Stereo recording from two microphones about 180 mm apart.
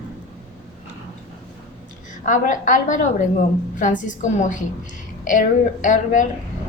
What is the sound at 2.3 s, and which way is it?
A woman's voice, 45° left (ahead or behind).